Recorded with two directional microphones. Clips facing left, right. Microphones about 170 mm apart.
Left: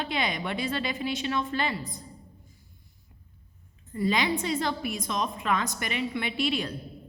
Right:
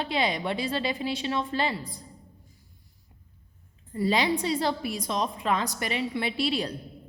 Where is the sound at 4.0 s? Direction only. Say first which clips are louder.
Right 1 dB; 35° right (ahead or behind).